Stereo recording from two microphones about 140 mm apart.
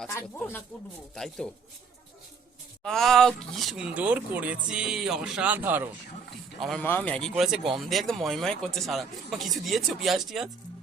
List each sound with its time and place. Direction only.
0.1 s speech: 15° left (ahead or behind)
1.1 s speech: 5° left (ahead or behind)
2.8 s speech: 5° left (ahead or behind); by 5.9 s 15° right (ahead or behind)
6.6 s speech: 5° left (ahead or behind)
7.3 s speech: 5° right (ahead or behind)